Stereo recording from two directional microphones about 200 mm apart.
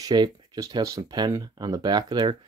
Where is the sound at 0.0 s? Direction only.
20° right (ahead or behind).